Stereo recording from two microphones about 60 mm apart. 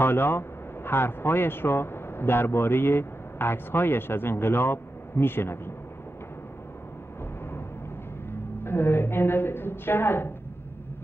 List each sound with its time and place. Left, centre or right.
0.0 s speech: left
8.3 s a woman's voice: left